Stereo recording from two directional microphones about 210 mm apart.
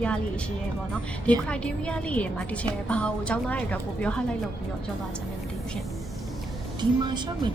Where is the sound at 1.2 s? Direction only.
5° left (ahead or behind).